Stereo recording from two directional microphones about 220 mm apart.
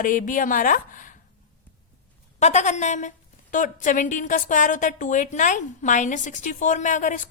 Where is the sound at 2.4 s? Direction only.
30° left (ahead or behind).